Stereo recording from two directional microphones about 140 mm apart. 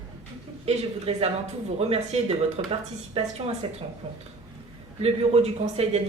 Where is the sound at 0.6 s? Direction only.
45° right (ahead or behind).